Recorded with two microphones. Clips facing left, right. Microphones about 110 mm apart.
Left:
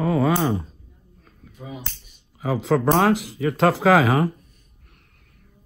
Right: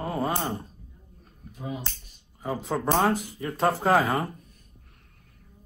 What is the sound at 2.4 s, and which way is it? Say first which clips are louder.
Speech: left 8 dB; 90° left.